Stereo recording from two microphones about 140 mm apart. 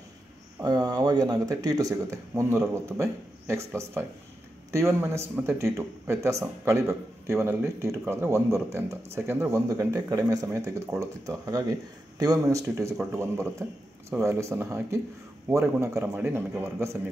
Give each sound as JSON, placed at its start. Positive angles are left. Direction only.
{"t": 0.6, "sound": "a man's voice", "side_deg": -25}